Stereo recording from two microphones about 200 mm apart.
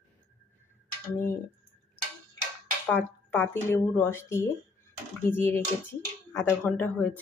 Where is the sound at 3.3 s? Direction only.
10° left (ahead or behind).